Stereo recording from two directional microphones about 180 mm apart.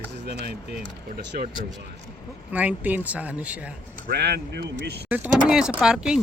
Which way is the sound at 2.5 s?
10° right (ahead or behind).